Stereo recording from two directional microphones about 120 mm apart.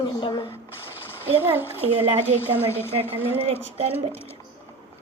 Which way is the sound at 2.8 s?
20° left (ahead or behind).